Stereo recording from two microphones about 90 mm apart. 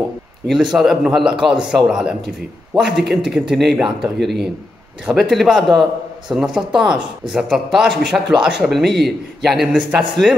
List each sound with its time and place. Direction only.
0.5 s a man's voice: centre (ahead or behind)
9.7 s speech: 15° right (ahead or behind)